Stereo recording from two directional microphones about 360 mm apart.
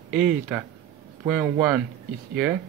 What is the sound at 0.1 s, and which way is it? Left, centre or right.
Speech, centre.